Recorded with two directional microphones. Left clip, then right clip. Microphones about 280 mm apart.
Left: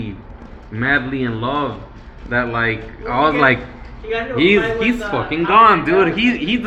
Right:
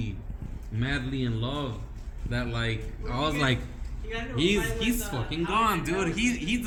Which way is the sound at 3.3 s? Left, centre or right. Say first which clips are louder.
Left 14 dB; right.